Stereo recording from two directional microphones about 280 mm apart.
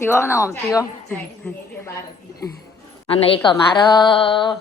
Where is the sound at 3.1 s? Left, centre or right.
Centre.